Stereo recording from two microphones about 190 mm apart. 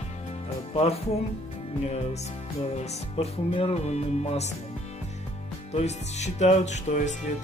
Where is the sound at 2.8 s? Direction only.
30° left (ahead or behind).